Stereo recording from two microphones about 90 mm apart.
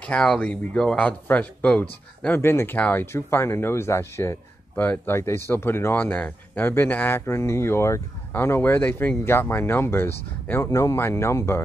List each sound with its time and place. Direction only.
0.1 s speech: 5° left (ahead or behind); by 10.7 s 25° left (ahead or behind)
10.7 s speech: 35° left (ahead or behind)